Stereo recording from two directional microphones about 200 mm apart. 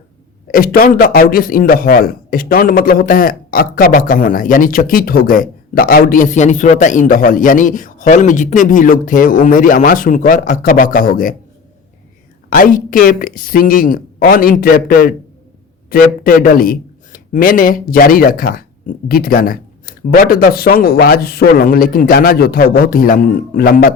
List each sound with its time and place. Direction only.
0.4 s a man's voice: 45° left (ahead or behind)
12.5 s a man's voice: 45° left (ahead or behind)